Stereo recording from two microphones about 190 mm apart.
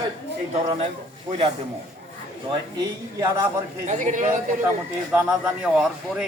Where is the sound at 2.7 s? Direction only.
20° right (ahead or behind).